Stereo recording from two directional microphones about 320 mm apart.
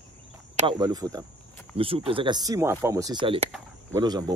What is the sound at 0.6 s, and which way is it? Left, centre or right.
Speech, centre.